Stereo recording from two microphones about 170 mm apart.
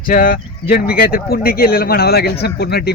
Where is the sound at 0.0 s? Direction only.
55° left (ahead or behind).